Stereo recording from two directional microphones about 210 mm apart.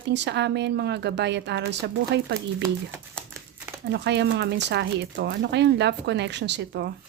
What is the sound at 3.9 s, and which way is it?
Speech, 55° right (ahead or behind).